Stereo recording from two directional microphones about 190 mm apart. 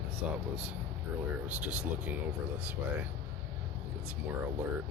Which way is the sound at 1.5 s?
10° right (ahead or behind).